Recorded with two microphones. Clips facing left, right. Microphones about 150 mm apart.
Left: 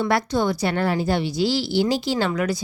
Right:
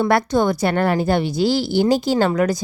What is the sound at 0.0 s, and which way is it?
A woman's voice, 55° right (ahead or behind).